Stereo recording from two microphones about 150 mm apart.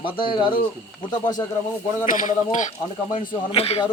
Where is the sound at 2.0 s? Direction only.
60° left (ahead or behind).